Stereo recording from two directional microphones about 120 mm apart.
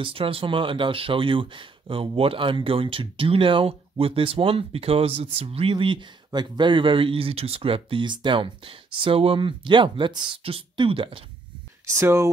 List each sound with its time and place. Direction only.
0.0 s speech: 50° right (ahead or behind)
11.8 s speech: 20° right (ahead or behind)